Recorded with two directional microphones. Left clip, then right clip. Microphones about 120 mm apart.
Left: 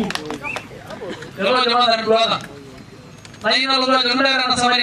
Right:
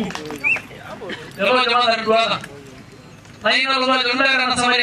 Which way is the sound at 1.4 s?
Centre (ahead or behind).